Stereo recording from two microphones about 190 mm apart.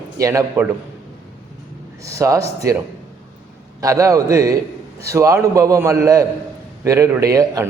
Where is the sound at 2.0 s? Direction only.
15° right (ahead or behind).